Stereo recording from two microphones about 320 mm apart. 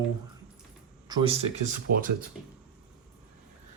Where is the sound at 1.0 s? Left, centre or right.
Centre.